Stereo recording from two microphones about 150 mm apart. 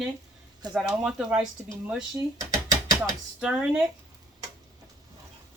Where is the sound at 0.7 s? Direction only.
5° right (ahead or behind).